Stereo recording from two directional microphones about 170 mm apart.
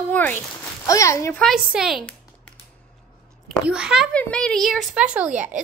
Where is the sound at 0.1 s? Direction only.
10° left (ahead or behind).